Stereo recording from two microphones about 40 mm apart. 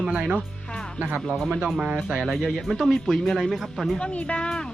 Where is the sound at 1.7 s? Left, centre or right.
Right.